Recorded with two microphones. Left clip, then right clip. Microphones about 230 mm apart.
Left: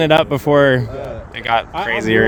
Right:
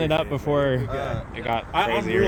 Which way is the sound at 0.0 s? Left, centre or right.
Left.